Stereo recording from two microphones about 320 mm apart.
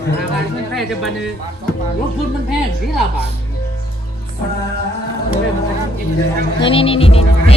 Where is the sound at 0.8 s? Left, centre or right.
Centre.